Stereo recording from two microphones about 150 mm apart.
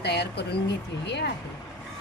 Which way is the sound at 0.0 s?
90° left.